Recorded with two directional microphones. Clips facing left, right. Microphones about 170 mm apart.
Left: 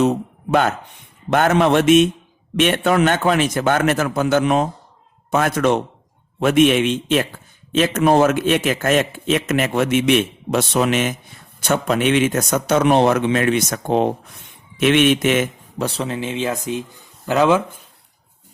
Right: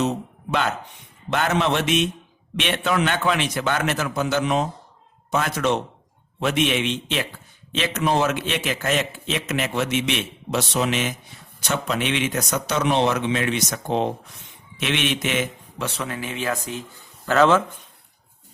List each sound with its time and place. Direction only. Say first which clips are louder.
1.3 s speech: left 6 dB; 50° left (ahead or behind)
15.8 s speech: left 6 dB; 35° left (ahead or behind); by 17.7 s 10° left (ahead or behind)